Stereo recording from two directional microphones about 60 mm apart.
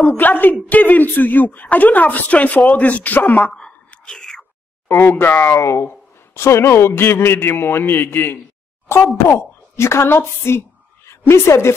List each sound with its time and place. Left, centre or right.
0.0 s a man's voice: left
3.5 s whispering: centre
4.8 s a sound: left
5.1 s a man's voice: left
9.1 s a woman's voice: left